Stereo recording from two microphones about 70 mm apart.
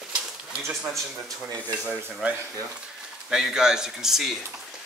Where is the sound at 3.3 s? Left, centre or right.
Centre.